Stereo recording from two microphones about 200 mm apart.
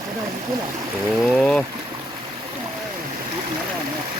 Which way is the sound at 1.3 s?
5° left (ahead or behind).